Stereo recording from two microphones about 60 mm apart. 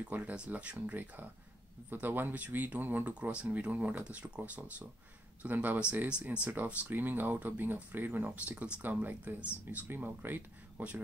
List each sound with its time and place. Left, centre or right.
0.0 s speech: right
0.7 s speech: right
3.2 s speech: centre